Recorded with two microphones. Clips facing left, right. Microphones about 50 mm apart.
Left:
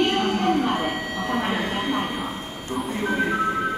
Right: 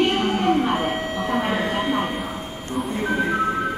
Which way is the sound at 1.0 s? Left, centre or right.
Centre.